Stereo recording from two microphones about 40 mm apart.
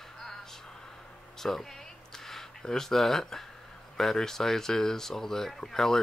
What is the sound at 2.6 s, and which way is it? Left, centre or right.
Speech, centre.